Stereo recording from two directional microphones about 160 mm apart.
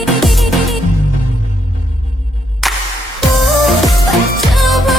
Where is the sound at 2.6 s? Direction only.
Centre (ahead or behind).